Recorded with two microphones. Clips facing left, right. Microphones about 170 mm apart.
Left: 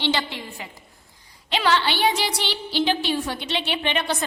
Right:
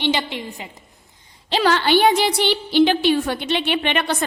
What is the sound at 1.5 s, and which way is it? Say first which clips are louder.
A woman's voice: right 4 dB; 40° right (ahead or behind).